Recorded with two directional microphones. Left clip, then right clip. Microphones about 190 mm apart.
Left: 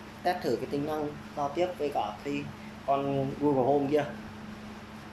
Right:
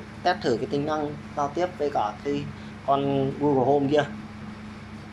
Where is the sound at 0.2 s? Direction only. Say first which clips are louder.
Right 5 dB; centre (ahead or behind).